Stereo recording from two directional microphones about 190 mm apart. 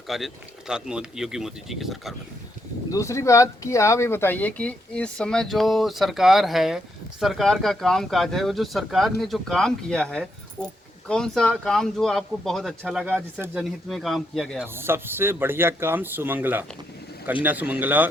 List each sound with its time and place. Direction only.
0.1 s speech: centre (ahead or behind)
2.9 s speech: 15° left (ahead or behind)
13.3 s speech: 10° right (ahead or behind)
13.6 s speech: centre (ahead or behind)
14.7 s speech: 10° right (ahead or behind)